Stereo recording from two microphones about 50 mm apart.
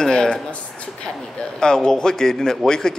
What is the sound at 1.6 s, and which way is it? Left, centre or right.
Speech, centre.